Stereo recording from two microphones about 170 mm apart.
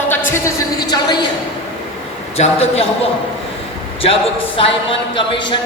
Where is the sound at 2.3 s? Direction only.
35° left (ahead or behind).